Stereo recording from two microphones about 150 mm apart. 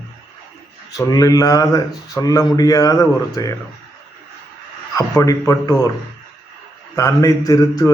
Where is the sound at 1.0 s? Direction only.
25° left (ahead or behind).